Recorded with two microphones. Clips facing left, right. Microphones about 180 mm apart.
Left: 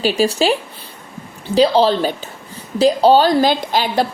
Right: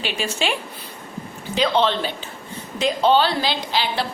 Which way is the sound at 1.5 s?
35° left (ahead or behind).